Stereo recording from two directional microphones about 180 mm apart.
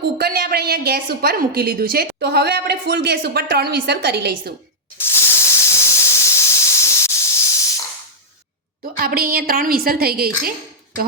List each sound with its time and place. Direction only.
0.0 s a woman's voice: 60° right (ahead or behind)
4.9 s hiss: 15° left (ahead or behind)
9.0 s a woman's voice: 55° right (ahead or behind)